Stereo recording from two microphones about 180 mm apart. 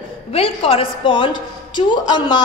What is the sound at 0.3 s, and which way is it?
A woman's voice, 30° left (ahead or behind).